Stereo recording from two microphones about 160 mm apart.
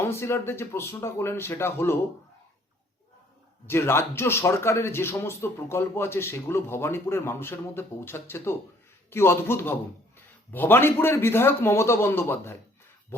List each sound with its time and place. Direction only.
0.0 s speech: 15° left (ahead or behind)
3.7 s speech: 15° left (ahead or behind)